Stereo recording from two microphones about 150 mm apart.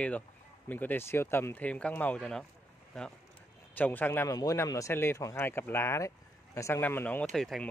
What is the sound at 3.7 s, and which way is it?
Speech, 10° left (ahead or behind).